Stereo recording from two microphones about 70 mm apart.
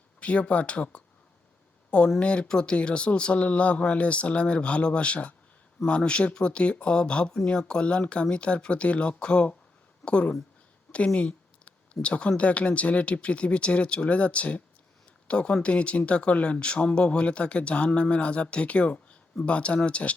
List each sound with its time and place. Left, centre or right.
0.2 s speech: centre
2.1 s speech: centre
10.9 s a sound: centre
11.9 s speech: centre